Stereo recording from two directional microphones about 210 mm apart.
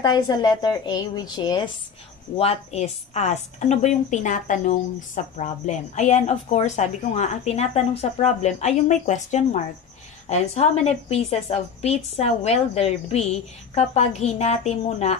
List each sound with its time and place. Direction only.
0.0 s a woman's voice: 20° left (ahead or behind)